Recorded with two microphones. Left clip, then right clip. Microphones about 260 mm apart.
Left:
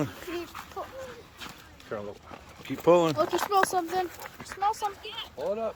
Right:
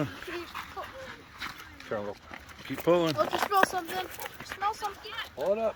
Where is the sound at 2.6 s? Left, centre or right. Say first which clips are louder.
Left 4 dB; centre.